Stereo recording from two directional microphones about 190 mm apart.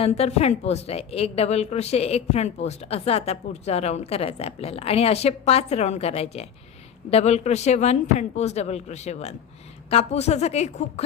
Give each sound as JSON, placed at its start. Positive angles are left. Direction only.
{"t": 0.0, "sound": "a woman's voice", "side_deg": 35}